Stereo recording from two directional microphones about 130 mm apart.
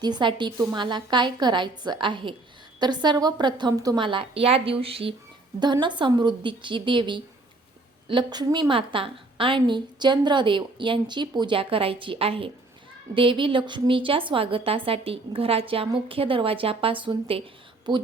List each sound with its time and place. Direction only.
0.0 s a woman's voice: 35° right (ahead or behind)
4.0 s a woman's voice: 40° right (ahead or behind)
5.5 s a woman's voice: 35° right (ahead or behind)